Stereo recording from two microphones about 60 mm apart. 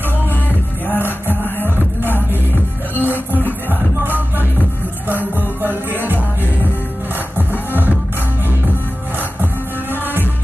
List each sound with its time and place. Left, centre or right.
0.5 s music: left
4.0 s music: right